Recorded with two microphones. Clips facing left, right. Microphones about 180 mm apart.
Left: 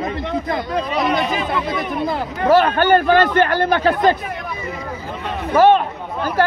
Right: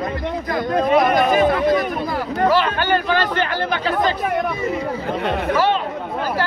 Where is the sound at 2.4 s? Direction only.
45° left (ahead or behind).